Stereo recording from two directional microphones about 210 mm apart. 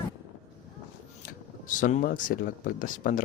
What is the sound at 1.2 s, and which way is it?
Speech, 40° left (ahead or behind).